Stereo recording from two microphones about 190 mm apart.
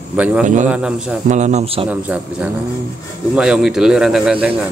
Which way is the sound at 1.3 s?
35° right (ahead or behind).